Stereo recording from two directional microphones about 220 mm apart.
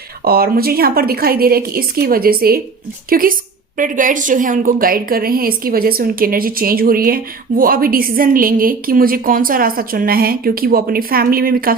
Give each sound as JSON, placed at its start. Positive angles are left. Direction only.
{"t": 0.3, "sound": "a woman's voice", "side_deg": -45}